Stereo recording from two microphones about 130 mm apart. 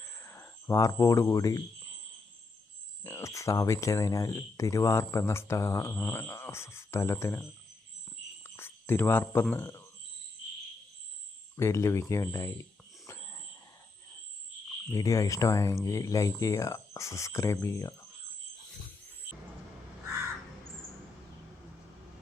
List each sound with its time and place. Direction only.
0.0 s a sound: 20° left (ahead or behind)
3.0 s speech: 20° left (ahead or behind)
8.4 s speech: 15° left (ahead or behind)
11.5 s speech: 20° left (ahead or behind)
13.1 s a sound: 20° left (ahead or behind)
14.8 s speech: 25° left (ahead or behind)